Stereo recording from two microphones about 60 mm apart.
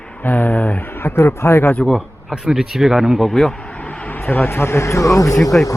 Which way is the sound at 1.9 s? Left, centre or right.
Centre.